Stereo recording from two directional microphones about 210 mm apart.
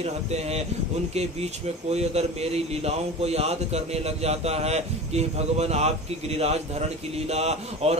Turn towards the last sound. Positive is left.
turn(degrees=-30)  # may be behind; listen again after turning